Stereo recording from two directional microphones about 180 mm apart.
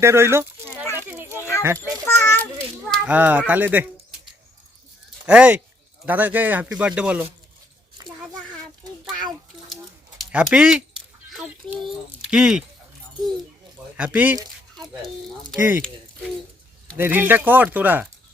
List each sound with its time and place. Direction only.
0.0 s speech: 15° right (ahead or behind)
0.9 s children playing: 10° right (ahead or behind)
1.6 s speech: 15° right (ahead or behind)
2.0 s a child's voice: 10° left (ahead or behind)
2.9 s speech: 5° right (ahead or behind)
5.2 s speech: 5° right (ahead or behind)
10.2 s speech: centre (ahead or behind)
13.9 s speech: 10° right (ahead or behind)
15.5 s speech: 10° right (ahead or behind)
17.0 s speech: 10° right (ahead or behind)